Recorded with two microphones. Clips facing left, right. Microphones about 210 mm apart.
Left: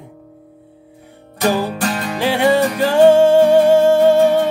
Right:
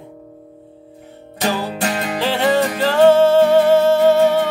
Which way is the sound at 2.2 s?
15° left (ahead or behind).